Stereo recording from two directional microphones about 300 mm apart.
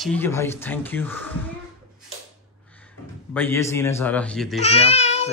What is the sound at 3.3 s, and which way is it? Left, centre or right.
A woman's voice, centre.